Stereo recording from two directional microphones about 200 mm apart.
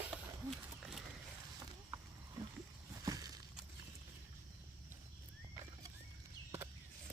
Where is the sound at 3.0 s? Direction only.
20° right (ahead or behind).